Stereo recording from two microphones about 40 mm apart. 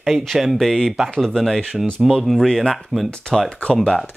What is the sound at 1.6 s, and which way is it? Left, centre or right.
Speech, centre.